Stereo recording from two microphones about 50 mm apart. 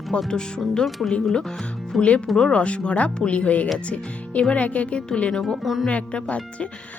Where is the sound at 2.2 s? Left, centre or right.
Centre.